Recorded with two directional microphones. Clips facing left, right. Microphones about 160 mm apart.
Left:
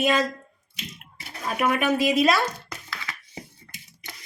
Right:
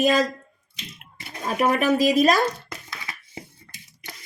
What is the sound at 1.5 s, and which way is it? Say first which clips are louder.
Speech: right 3 dB; 35° right (ahead or behind).